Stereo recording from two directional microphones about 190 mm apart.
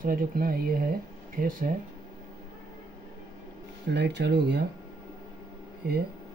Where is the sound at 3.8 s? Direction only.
65° right (ahead or behind).